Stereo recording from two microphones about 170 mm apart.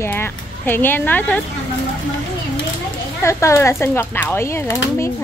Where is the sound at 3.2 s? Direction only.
15° left (ahead or behind).